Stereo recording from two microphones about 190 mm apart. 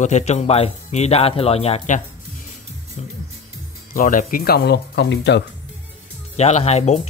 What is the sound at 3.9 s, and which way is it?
Speech, 45° left (ahead or behind).